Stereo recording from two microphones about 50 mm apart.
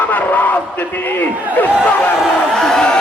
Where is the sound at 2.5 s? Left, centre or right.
Centre.